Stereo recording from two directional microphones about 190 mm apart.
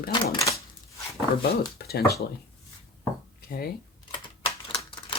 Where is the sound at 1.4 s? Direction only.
55° left (ahead or behind).